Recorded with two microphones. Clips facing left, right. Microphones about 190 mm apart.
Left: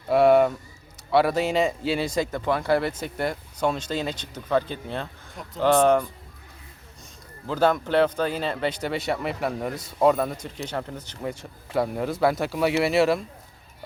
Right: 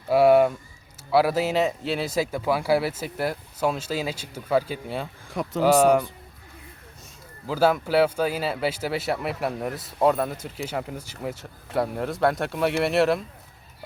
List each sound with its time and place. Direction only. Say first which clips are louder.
0.1 s speech: even; 5° right (ahead or behind)
5.3 s speech: right 8 dB; 75° right (ahead or behind)
5.6 s speech: even; 10° right (ahead or behind)
7.4 s speech: right 1 dB; 5° right (ahead or behind)